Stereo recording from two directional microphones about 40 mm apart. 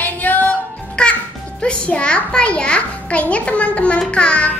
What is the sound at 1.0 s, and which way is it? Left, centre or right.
Music, left.